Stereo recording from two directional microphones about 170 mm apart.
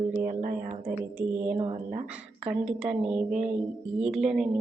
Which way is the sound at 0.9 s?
10° right (ahead or behind).